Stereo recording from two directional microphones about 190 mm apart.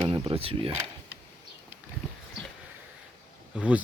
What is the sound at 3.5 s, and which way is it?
Speech, 5° right (ahead or behind).